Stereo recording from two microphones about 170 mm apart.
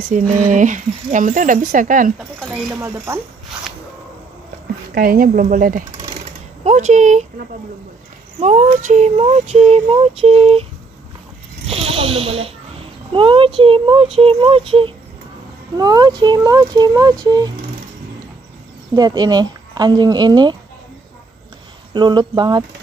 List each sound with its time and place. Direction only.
0.1 s speech: 45° right (ahead or behind)
2.7 s speech: 15° right (ahead or behind)
4.9 s speech: 55° right (ahead or behind)
6.6 s speech: 45° right (ahead or behind)
8.4 s a sound: 40° right (ahead or behind)
11.7 s a sound: 35° right (ahead or behind)
15.8 s speech: 25° right (ahead or behind)
18.9 s speech: 25° right (ahead or behind)
21.9 s speech: 25° right (ahead or behind)